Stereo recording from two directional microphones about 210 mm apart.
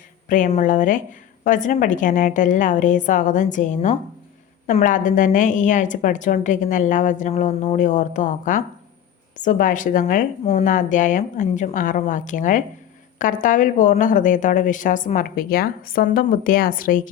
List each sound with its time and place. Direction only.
0.3 s a woman's voice: 35° left (ahead or behind)